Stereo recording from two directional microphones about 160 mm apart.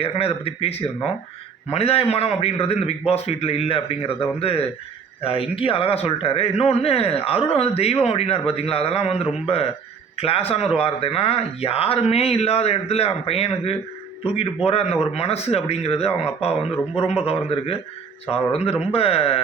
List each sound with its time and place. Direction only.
0.0 s speech: 35° left (ahead or behind)
18.5 s speech: 40° left (ahead or behind)